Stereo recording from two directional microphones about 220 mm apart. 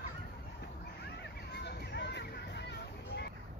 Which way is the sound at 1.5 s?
50° left (ahead or behind).